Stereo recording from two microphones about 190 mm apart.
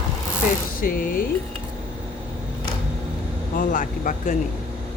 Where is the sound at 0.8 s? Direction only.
50° left (ahead or behind).